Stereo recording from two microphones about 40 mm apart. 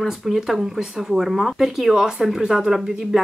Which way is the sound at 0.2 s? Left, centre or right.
Centre.